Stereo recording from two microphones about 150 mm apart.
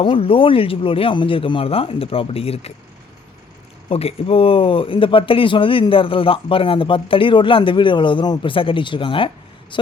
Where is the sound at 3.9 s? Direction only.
40° left (ahead or behind).